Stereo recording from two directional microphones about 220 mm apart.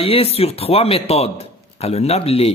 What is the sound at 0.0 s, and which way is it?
Speech, 25° left (ahead or behind).